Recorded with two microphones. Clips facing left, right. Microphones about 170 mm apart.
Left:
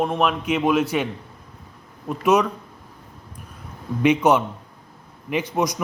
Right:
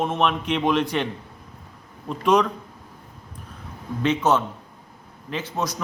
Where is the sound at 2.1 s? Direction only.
10° left (ahead or behind).